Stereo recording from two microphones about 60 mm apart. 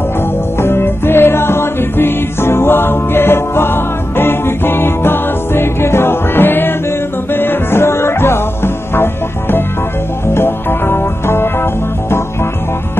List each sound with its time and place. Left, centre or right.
0.6 s music: left